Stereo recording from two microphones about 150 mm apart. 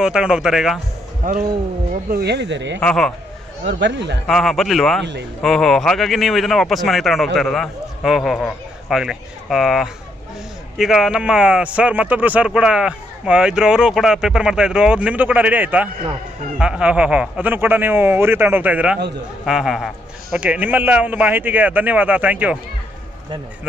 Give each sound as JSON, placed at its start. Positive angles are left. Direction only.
{"t": 0.0, "sound": "a man's voice", "side_deg": -5}
{"t": 1.2, "sound": "speech", "side_deg": -60}
{"t": 2.8, "sound": "a man's voice", "side_deg": 5}
{"t": 4.3, "sound": "a man's voice", "side_deg": 0}